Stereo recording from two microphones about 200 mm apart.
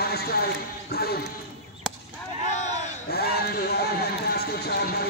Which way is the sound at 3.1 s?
50° left (ahead or behind).